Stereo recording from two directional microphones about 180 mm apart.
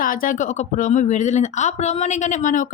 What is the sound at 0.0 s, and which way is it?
Speech, 50° left (ahead or behind).